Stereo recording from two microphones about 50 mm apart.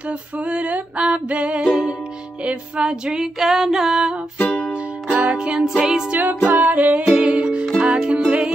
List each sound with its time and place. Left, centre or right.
0.5 s music: right
2.4 s female singing: centre
4.4 s music: left
5.1 s music: right
5.7 s female singing: centre
6.1 s music: right